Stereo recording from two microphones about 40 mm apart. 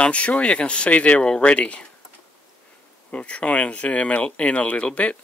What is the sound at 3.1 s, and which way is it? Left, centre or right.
Speech, left.